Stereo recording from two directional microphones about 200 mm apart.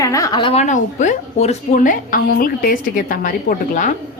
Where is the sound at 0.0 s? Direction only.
15° left (ahead or behind); by 3.9 s 40° left (ahead or behind).